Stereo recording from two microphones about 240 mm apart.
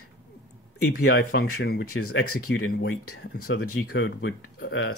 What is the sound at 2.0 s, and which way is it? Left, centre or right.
Speech, left.